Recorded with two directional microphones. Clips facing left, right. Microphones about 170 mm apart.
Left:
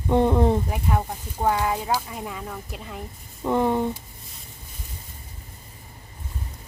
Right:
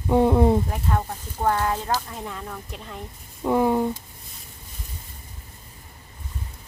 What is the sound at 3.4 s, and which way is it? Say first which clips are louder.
Speech: right 1 dB; 5° right (ahead or behind).